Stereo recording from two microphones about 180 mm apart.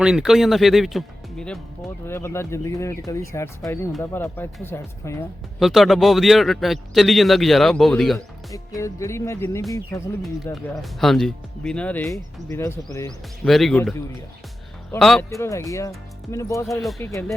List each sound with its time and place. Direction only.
0.0 s a man's voice: 5° right (ahead or behind)
2.0 s speech: 15° left (ahead or behind)
5.5 s a man's voice: centre (ahead or behind)
8.5 s speech: 15° left (ahead or behind)
10.5 s speech: centre (ahead or behind)
13.4 s a man's voice: centre (ahead or behind)
14.9 s a man's voice: centre (ahead or behind)
15.4 s speech: 15° left (ahead or behind)